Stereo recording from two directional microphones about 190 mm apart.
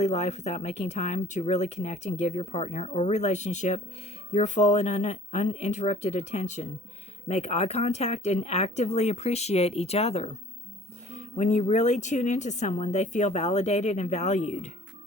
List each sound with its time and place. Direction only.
0.0 s speech: 35° left (ahead or behind)